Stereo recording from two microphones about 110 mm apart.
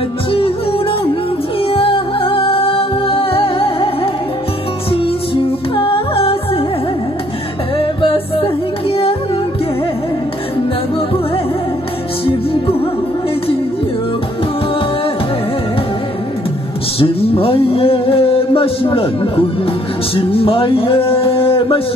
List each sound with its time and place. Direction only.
0.3 s music: 55° left (ahead or behind)
7.7 s music: 50° left (ahead or behind)
17.0 s music: 55° left (ahead or behind)
20.2 s a sound: 55° left (ahead or behind)